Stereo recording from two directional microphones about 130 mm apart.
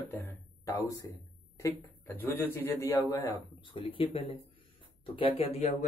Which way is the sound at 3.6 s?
40° left (ahead or behind).